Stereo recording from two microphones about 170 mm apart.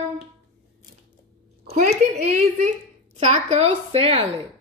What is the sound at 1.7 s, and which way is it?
A woman's voice, 50° right (ahead or behind).